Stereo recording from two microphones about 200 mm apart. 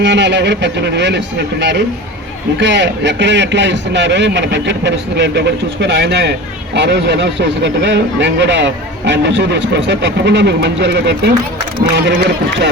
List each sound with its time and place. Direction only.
0.0 s speech: 60° right (ahead or behind)